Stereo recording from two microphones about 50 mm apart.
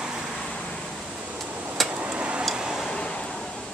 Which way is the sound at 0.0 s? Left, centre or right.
Centre.